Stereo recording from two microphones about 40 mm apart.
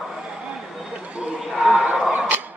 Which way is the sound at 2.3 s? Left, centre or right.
Right.